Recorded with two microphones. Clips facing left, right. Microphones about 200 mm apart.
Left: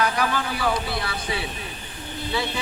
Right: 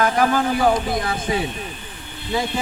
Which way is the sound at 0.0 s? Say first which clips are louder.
Right 6 dB; 45° right (ahead or behind).